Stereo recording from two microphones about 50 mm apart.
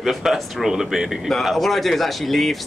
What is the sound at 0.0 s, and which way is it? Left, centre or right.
Speech, centre.